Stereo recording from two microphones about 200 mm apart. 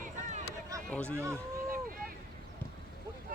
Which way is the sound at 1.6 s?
45° right (ahead or behind).